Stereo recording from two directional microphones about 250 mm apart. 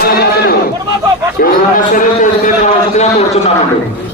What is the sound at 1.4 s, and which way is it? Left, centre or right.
A man's voice, left.